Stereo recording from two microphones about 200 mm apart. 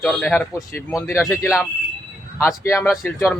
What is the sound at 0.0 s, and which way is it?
Speech, 5° left (ahead or behind).